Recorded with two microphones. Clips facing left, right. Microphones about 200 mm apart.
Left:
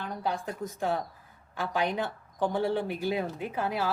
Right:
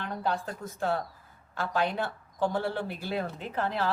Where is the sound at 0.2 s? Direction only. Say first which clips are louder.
Even; 15° left (ahead or behind).